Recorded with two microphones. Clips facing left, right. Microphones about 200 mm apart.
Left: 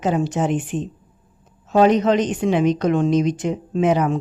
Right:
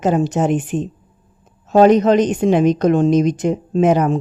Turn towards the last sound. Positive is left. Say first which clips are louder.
# right 4 dB
turn(degrees=-45)  # may be behind; listen again after turning